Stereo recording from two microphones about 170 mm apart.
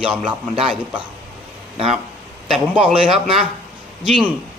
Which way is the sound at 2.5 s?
5° right (ahead or behind).